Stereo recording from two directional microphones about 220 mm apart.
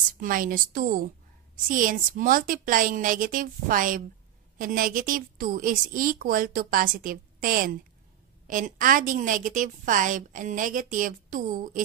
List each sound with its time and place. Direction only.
0.2 s a woman's voice: 40° right (ahead or behind)